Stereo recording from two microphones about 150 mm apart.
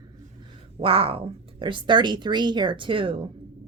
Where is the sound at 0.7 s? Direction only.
40° right (ahead or behind).